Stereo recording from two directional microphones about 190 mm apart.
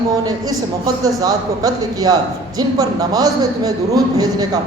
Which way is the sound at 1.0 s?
20° right (ahead or behind).